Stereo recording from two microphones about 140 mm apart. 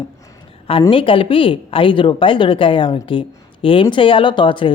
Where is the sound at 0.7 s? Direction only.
40° left (ahead or behind).